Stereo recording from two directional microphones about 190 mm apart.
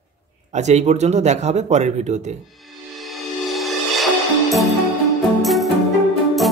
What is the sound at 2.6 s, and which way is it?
Music, centre (ahead or behind).